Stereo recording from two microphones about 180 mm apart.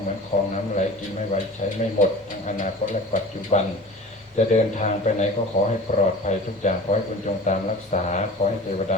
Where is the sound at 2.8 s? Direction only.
45° left (ahead or behind).